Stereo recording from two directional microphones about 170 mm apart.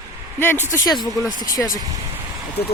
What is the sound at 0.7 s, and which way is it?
Speech, 20° left (ahead or behind).